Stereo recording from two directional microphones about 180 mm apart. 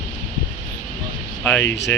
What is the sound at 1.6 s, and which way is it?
Speech, 75° left (ahead or behind).